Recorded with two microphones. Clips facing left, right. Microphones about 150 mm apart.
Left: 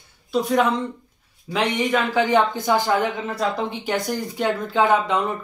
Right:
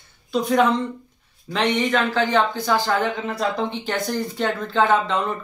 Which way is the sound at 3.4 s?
5° left (ahead or behind).